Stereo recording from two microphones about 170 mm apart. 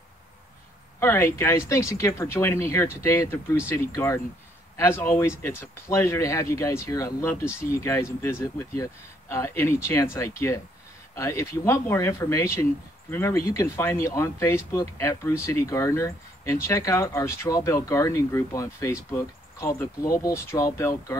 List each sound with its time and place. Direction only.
0.9 s speech: 15° left (ahead or behind)